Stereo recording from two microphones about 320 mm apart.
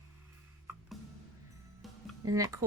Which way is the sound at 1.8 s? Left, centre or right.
Centre.